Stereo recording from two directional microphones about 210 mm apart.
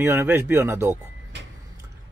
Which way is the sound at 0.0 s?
10° right (ahead or behind).